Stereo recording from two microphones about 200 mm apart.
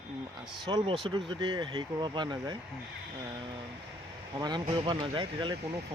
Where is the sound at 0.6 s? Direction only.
25° right (ahead or behind).